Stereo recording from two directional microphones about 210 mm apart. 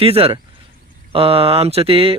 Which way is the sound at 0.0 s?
25° right (ahead or behind).